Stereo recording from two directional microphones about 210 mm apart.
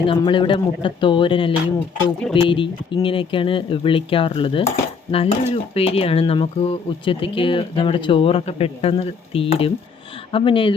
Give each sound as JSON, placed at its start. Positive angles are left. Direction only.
{"t": 0.0, "sound": "speech", "side_deg": 25}